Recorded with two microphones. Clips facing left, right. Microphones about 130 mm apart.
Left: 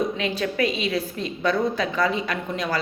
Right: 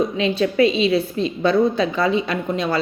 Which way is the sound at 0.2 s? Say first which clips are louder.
Right 7 dB; 25° right (ahead or behind).